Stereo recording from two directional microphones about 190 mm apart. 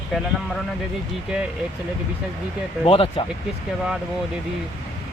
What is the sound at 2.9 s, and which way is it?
Speech, 30° left (ahead or behind).